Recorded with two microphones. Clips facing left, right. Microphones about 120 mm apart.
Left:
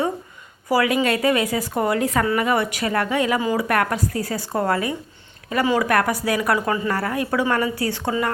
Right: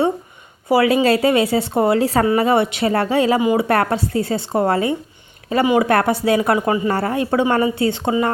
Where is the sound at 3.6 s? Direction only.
30° right (ahead or behind).